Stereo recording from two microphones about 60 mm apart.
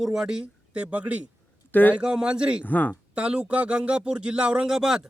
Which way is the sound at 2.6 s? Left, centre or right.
Left.